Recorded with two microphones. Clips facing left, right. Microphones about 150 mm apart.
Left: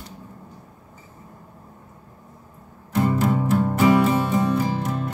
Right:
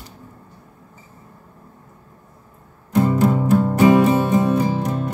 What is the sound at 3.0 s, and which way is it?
Music, 15° right (ahead or behind).